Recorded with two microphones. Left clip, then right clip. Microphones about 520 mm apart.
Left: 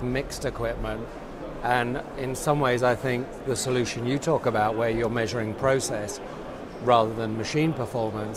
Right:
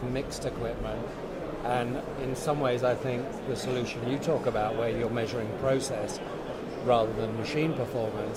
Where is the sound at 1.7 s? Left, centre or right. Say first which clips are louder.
Left 6 dB; left.